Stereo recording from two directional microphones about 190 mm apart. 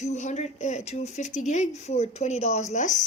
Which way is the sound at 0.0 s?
40° left (ahead or behind).